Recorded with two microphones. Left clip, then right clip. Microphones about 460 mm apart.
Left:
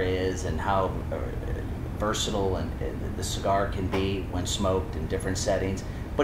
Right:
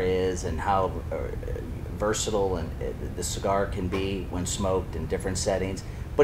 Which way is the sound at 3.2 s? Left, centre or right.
Right.